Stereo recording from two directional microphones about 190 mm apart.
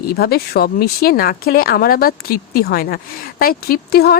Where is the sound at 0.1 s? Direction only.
55° left (ahead or behind).